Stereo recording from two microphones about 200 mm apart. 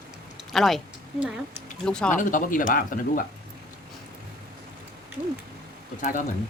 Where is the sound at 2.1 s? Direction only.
40° left (ahead or behind).